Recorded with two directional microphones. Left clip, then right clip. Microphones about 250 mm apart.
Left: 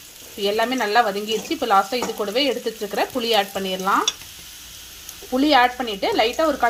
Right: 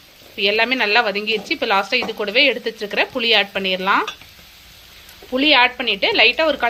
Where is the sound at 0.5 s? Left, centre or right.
Centre.